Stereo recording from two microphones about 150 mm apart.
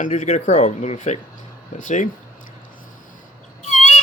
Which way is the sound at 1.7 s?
60° left (ahead or behind).